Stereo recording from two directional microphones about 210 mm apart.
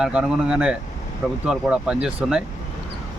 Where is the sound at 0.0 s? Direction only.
5° right (ahead or behind).